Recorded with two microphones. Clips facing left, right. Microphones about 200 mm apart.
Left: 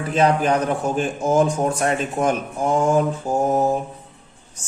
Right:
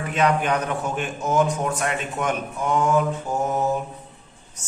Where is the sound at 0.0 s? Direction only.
35° left (ahead or behind).